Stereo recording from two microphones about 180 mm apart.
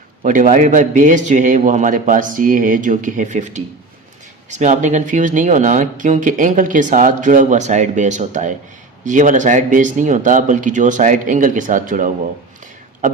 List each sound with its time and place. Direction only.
0.2 s speech: 45° right (ahead or behind)